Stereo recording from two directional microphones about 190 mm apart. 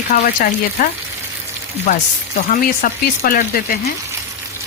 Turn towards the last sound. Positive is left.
turn(degrees=50)  # may be behind; listen again after turning